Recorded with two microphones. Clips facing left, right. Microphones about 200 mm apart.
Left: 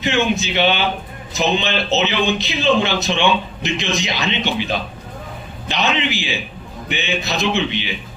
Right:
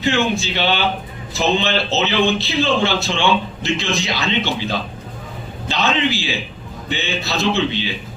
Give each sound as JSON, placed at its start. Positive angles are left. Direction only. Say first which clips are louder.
{"t": 0.0, "sound": "speech", "louder": "even", "side_deg": 20}